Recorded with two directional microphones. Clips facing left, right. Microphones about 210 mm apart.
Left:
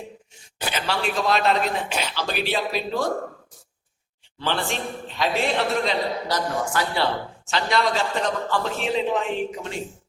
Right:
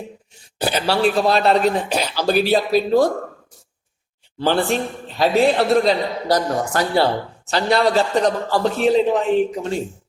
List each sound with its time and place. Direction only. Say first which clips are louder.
0.6 s a man's voice: right 8 dB; 35° right (ahead or behind)
4.4 s a man's voice: right 8 dB; 35° right (ahead or behind)